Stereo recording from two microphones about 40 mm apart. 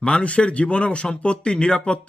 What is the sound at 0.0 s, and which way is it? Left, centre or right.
Speech, left.